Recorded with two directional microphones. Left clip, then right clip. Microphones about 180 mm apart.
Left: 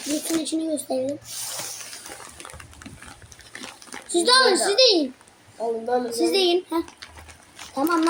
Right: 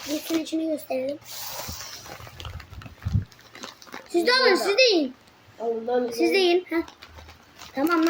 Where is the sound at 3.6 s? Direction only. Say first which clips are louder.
Even; 10° right (ahead or behind).